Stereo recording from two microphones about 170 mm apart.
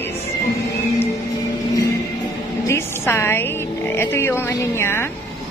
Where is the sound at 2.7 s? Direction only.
15° left (ahead or behind).